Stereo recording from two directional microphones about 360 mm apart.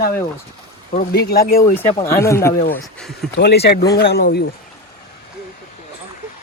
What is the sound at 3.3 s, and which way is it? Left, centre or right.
Speech, left.